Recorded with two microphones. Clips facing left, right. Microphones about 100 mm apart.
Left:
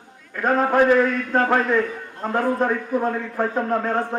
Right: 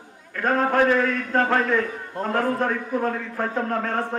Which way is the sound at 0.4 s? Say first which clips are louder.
Left 2 dB; 15° left (ahead or behind).